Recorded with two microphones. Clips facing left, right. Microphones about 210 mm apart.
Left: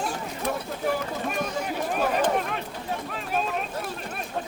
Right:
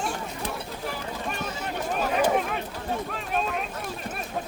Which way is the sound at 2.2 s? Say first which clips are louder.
Right 1 dB; 5° right (ahead or behind).